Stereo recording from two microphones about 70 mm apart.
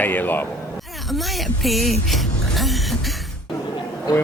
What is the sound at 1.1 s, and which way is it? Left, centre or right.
Speech, centre.